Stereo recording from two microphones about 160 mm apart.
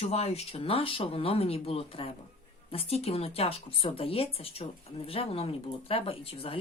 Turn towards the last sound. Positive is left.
turn(degrees=35)  # may be behind; listen again after turning